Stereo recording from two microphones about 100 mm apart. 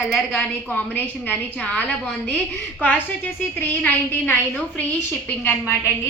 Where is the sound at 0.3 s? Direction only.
15° left (ahead or behind).